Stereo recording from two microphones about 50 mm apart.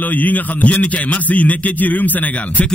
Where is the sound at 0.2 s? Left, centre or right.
Left.